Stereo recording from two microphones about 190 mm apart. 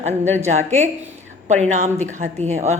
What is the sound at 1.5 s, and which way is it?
A woman's voice, 35° right (ahead or behind).